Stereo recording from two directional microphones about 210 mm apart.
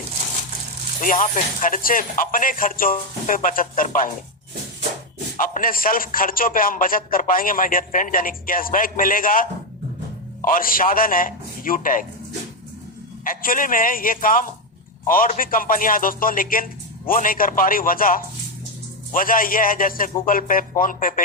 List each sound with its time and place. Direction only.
1.0 s a man's voice: 40° left (ahead or behind)
5.4 s a man's voice: 40° left (ahead or behind)
13.2 s a man's voice: 40° left (ahead or behind)